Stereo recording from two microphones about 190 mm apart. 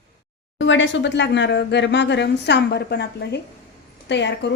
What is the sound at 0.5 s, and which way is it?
A woman's voice, 75° left (ahead or behind).